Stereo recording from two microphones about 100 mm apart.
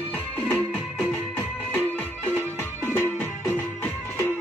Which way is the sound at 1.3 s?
20° left (ahead or behind).